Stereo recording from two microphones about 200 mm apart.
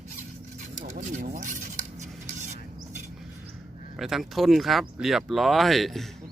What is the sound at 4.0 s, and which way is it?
Speech, centre (ahead or behind).